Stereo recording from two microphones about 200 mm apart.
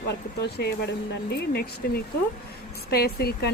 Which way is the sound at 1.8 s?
50° left (ahead or behind).